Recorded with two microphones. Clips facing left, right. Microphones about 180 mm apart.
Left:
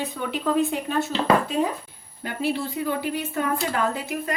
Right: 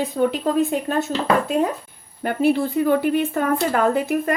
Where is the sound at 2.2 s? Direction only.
50° right (ahead or behind).